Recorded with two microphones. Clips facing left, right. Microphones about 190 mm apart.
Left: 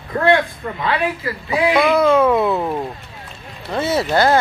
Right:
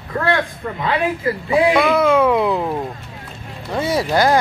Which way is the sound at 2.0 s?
10° right (ahead or behind).